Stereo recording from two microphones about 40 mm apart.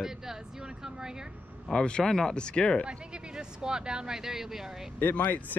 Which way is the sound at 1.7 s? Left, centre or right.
Left.